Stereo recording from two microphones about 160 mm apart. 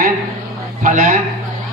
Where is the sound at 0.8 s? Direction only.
50° right (ahead or behind).